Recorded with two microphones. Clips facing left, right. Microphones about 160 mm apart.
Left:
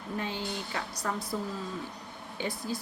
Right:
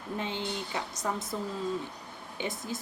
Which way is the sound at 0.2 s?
20° right (ahead or behind).